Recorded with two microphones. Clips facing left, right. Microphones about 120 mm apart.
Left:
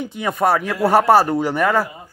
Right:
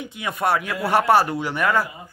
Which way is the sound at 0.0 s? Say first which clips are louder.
Left 5 dB; 35° left (ahead or behind).